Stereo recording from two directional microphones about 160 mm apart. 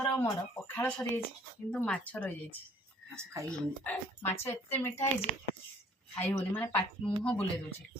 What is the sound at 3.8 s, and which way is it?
Speech, 10° left (ahead or behind).